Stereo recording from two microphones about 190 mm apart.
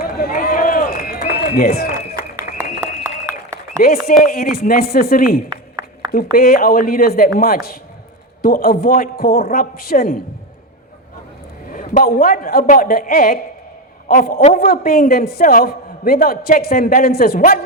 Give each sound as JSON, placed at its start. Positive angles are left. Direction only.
{"t": 0.0, "sound": "run", "side_deg": 50}
{"t": 2.5, "sound": "a sound", "side_deg": 50}
{"t": 3.8, "sound": "a man's voice", "side_deg": 50}
{"t": 5.5, "sound": "a sound", "side_deg": -20}
{"t": 6.3, "sound": "a man's voice", "side_deg": 50}
{"t": 11.7, "sound": "a man's voice", "side_deg": 45}